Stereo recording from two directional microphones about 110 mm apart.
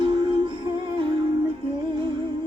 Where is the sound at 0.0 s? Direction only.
50° right (ahead or behind).